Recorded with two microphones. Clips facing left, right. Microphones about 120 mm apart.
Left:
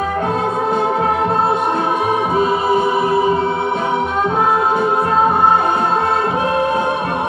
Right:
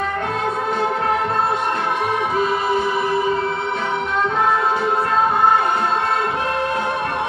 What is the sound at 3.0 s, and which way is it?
Choir, 30° left (ahead or behind).